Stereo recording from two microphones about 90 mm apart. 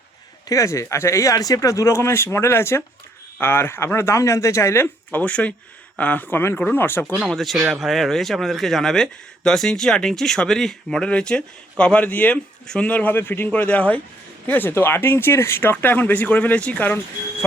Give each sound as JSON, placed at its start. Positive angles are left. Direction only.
{"t": 0.4, "sound": "speech", "side_deg": 35}
{"t": 5.2, "sound": "speech", "side_deg": 15}
{"t": 7.2, "sound": "speech", "side_deg": 0}